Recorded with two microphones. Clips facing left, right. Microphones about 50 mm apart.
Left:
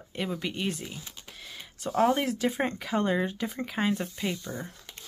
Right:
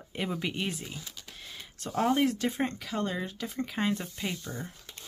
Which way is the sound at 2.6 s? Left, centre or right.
Left.